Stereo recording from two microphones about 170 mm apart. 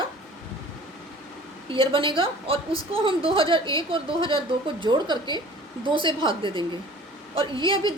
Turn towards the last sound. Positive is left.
turn(degrees=-30)  # may be behind; listen again after turning